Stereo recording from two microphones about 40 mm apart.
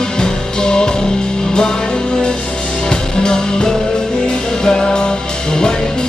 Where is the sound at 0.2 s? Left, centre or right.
Centre.